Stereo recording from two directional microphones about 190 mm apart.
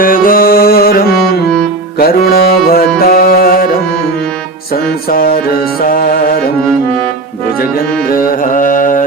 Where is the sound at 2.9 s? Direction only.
50° left (ahead or behind).